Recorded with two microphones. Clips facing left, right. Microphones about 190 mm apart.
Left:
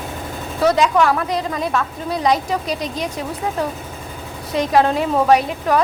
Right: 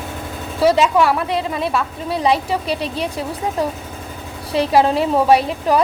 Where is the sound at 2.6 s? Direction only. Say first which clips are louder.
Right 2 dB; 30° right (ahead or behind).